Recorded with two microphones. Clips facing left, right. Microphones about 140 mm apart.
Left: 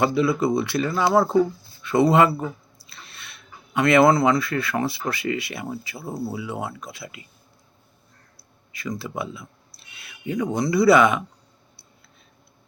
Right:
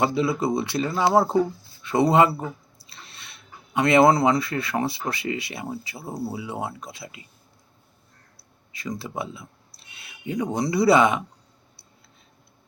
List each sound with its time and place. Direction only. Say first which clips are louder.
0.0 s speech: left 2 dB; 25° right (ahead or behind)
6.1 s speech: left 1 dB; 15° right (ahead or behind)
6.3 s speech: left 1 dB; 30° right (ahead or behind)
9.0 s speech: left 1 dB; 30° right (ahead or behind)